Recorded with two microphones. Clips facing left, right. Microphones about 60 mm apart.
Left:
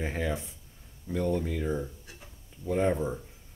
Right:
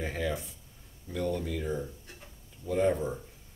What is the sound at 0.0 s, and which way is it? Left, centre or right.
Speech, left.